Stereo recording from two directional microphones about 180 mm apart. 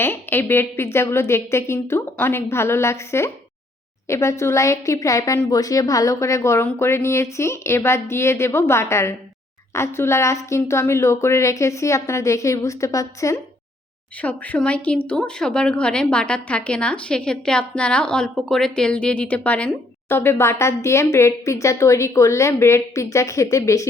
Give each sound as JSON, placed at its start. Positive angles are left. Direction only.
{"t": 0.0, "sound": "speech", "side_deg": 10}